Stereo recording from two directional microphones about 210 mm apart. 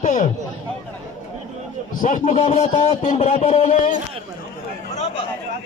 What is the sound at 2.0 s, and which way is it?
A man's voice, 40° left (ahead or behind).